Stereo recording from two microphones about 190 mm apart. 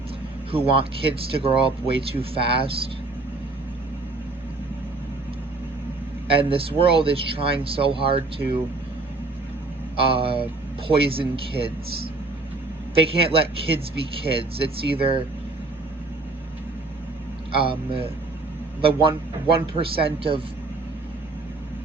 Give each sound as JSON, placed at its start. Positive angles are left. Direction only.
{"t": 0.5, "sound": "speech", "side_deg": -30}
{"t": 6.2, "sound": "speech", "side_deg": -30}
{"t": 10.1, "sound": "speech", "side_deg": -30}
{"t": 13.0, "sound": "speech", "side_deg": -30}
{"t": 17.5, "sound": "speech", "side_deg": -30}